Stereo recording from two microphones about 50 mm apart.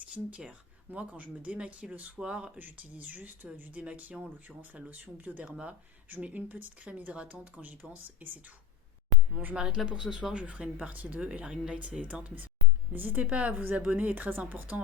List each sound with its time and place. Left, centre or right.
0.1 s speech: right
2.6 s speech: right
5.5 s speech: centre
6.1 s speech: right
9.6 s speech: centre
10.8 s speech: right
12.9 s speech: right
13.3 s speech: right